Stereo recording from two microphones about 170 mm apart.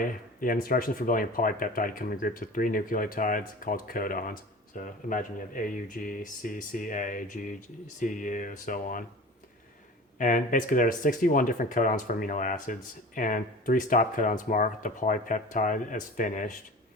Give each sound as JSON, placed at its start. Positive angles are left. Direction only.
{"t": 0.0, "sound": "speech", "side_deg": 55}
{"t": 10.2, "sound": "speech", "side_deg": 50}